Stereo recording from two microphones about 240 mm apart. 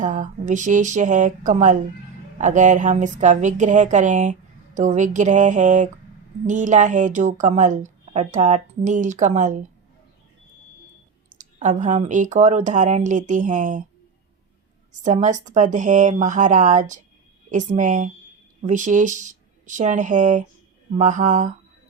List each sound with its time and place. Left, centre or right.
0.0 s a woman's voice: right
11.3 s a woman's voice: right
15.0 s a woman's voice: right